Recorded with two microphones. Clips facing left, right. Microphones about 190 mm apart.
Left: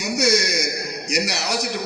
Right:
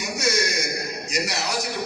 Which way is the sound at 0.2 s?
70° left (ahead or behind).